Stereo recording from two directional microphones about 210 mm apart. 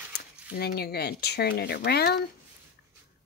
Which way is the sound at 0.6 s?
50° left (ahead or behind).